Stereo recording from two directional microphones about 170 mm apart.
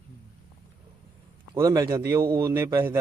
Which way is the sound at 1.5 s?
20° right (ahead or behind).